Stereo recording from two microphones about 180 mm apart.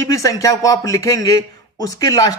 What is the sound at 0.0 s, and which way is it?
Speech, 20° left (ahead or behind).